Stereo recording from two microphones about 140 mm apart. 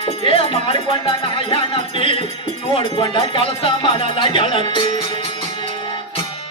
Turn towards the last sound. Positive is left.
turn(degrees=40)  # may be behind; listen again after turning